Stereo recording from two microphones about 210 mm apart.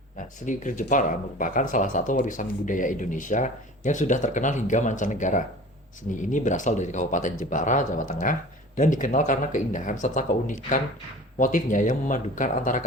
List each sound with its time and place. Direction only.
0.4 s speech: 35° left (ahead or behind)